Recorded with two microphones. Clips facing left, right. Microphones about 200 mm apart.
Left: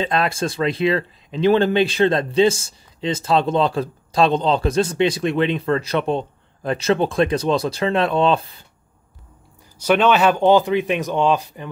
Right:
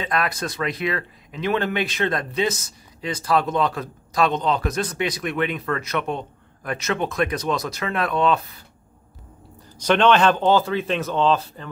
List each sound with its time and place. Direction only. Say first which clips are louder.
0.0 s speech: left 4 dB; 25° left (ahead or behind)
9.8 s speech: left 1 dB; 10° left (ahead or behind)